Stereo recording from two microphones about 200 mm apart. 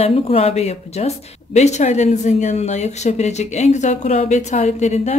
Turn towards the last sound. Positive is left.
turn(degrees=35)  # may be behind; listen again after turning